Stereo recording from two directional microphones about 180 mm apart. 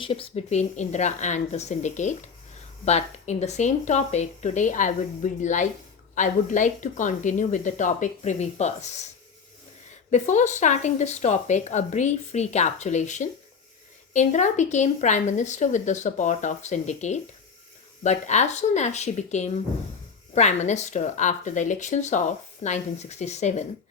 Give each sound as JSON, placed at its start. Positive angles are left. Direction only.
{"t": 0.0, "sound": "speech", "side_deg": 30}
{"t": 10.1, "sound": "speech", "side_deg": 40}